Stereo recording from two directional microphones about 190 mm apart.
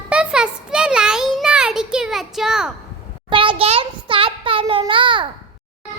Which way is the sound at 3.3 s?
25° right (ahead or behind).